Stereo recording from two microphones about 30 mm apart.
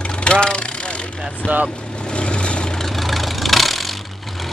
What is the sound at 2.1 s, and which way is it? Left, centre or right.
Vehicle, left.